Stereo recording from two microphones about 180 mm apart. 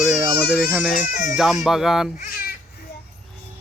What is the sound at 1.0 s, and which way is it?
Speech, 45° left (ahead or behind).